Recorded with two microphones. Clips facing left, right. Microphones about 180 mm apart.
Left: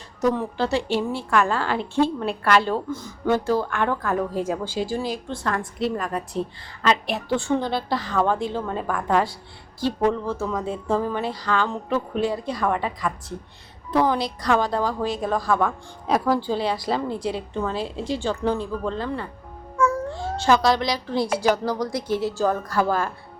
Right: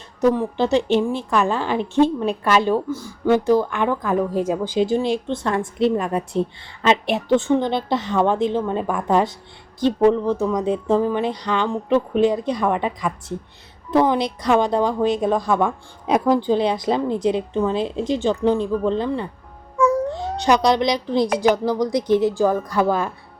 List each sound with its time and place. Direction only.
0.2 s a woman's voice: 20° right (ahead or behind)